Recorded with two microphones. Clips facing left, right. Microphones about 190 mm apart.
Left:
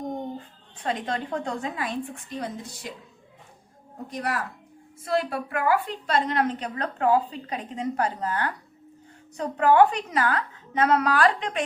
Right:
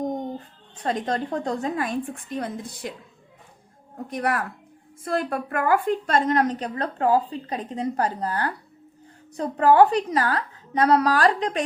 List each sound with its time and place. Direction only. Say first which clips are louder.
0.8 s a woman's voice: right 3 dB; 40° right (ahead or behind)
4.1 s a woman's voice: right 4 dB; 60° right (ahead or behind); by 11.6 s 35° right (ahead or behind)